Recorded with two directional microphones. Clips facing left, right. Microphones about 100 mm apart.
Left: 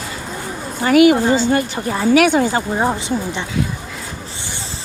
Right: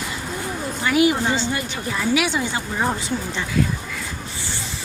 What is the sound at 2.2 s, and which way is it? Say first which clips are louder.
Speech: left 9 dB; 50° left (ahead or behind).